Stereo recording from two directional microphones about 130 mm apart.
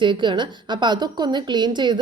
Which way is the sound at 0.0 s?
40° right (ahead or behind).